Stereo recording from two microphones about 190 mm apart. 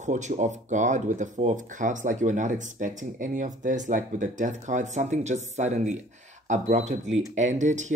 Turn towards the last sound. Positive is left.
turn(degrees=-40)  # may be behind; listen again after turning